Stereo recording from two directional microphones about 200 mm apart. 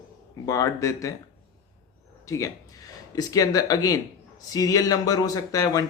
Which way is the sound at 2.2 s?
15° left (ahead or behind).